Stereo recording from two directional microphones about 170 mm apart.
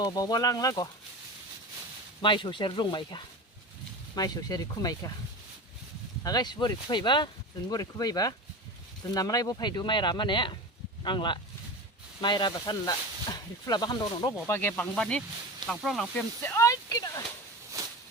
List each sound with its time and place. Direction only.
0.0 s speech: 20° left (ahead or behind)
2.2 s speech: 30° left (ahead or behind)
6.2 s speech: 25° left (ahead or behind); by 16.2 s centre (ahead or behind)
16.4 s speech: 15° left (ahead or behind)
17.8 s a sound: 20° right (ahead or behind)